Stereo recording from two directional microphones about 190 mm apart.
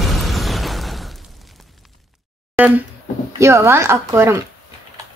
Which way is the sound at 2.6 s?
10° right (ahead or behind).